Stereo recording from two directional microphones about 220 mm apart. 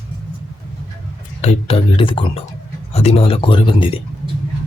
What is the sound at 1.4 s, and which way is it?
Speech, 25° left (ahead or behind).